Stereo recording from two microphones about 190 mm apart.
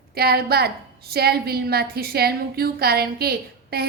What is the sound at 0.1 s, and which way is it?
A woman's voice, 55° right (ahead or behind).